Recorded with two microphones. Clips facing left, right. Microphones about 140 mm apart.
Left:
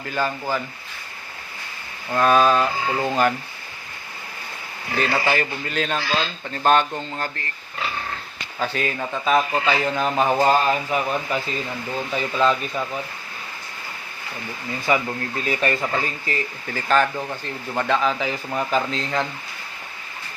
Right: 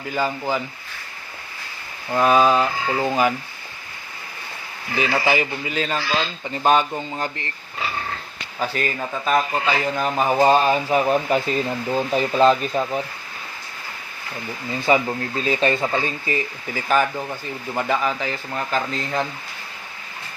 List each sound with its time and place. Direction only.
0.0 s speech: 15° right (ahead or behind)
2.1 s speech: 10° right (ahead or behind)
4.9 s speech: 10° right (ahead or behind)
8.5 s speech: 5° right (ahead or behind)
10.4 s speech: 25° right (ahead or behind)
14.8 s speech: 20° right (ahead or behind)